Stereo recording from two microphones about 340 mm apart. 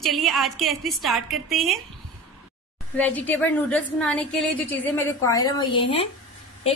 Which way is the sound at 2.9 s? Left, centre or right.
Centre.